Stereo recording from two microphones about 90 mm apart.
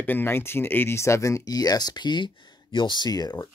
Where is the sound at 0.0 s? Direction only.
25° left (ahead or behind).